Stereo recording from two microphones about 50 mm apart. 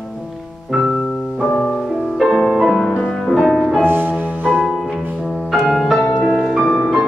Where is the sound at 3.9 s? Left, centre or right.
Right.